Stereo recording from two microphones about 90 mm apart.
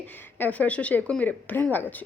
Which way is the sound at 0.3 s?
20° left (ahead or behind).